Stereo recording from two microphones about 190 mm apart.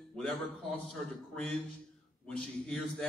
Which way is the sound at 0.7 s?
5° left (ahead or behind).